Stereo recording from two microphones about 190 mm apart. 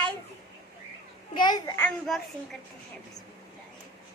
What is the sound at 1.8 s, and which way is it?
Speech, centre (ahead or behind).